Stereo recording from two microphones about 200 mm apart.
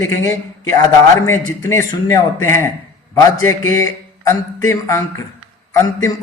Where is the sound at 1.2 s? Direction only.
15° left (ahead or behind).